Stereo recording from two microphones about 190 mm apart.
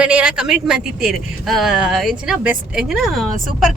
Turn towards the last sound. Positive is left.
turn(degrees=0)  # may be behind; listen again after turning